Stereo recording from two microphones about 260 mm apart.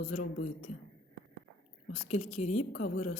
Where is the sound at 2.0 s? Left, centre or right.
Left.